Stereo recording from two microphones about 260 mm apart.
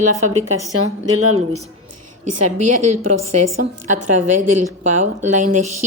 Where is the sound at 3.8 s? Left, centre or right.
Right.